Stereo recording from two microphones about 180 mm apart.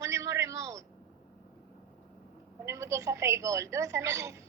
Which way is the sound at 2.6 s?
15° right (ahead or behind).